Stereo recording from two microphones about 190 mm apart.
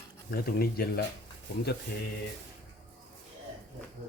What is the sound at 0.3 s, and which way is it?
Speech, 50° left (ahead or behind).